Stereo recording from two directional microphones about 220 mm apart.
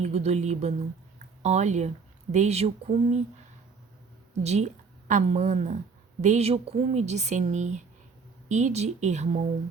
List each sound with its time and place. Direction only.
0.0 s speech: 30° right (ahead or behind)
4.4 s a woman's voice: 30° right (ahead or behind)